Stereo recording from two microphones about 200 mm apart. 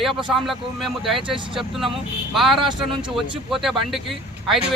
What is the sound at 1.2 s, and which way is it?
Speech, 25° right (ahead or behind).